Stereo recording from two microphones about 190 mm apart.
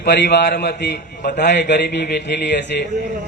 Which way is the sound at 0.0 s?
60° left (ahead or behind).